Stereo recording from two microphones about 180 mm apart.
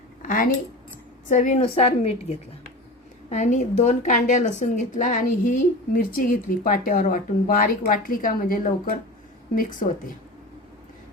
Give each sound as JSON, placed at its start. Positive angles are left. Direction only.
{"t": 0.2, "sound": "a sound", "side_deg": 50}
{"t": 1.3, "sound": "a woman's voice", "side_deg": 40}
{"t": 3.2, "sound": "a woman's voice", "side_deg": 40}